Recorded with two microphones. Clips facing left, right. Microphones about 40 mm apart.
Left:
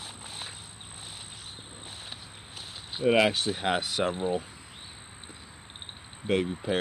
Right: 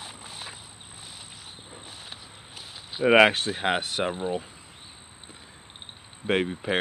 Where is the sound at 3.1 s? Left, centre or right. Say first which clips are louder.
Right 5 dB; right.